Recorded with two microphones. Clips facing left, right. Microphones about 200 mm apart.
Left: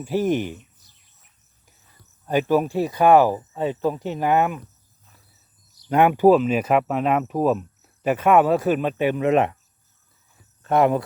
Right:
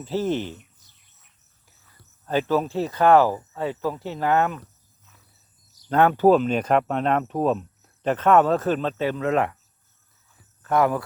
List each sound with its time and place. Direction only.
0.0 s speech: 15° left (ahead or behind)
2.2 s speech: 15° left (ahead or behind)
5.9 s speech: 15° left (ahead or behind)
10.6 s speech: 20° left (ahead or behind)